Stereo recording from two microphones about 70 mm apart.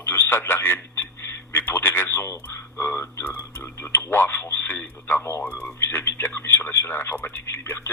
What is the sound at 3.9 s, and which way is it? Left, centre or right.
Speech, left.